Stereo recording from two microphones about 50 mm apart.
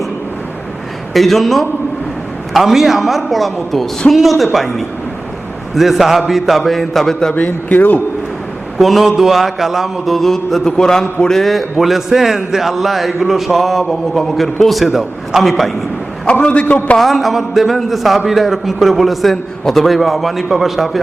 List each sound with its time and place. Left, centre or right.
1.1 s a man's voice: centre
7.3 s a man's voice: left
8.8 s a man's voice: centre
16.2 s a man's voice: left
17.0 s a man's voice: centre